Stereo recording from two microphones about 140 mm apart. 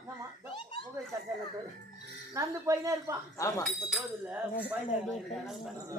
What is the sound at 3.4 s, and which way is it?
Speech, 25° left (ahead or behind).